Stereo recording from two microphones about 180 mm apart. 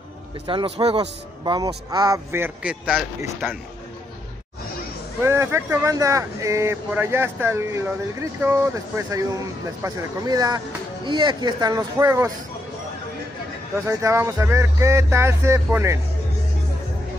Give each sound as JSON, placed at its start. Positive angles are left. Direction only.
{"t": 0.5, "sound": "a man's voice", "side_deg": -25}
{"t": 5.2, "sound": "a man's voice", "side_deg": -15}
{"t": 13.8, "sound": "speech", "side_deg": -15}